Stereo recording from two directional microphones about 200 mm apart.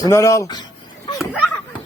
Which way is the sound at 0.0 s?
15° left (ahead or behind).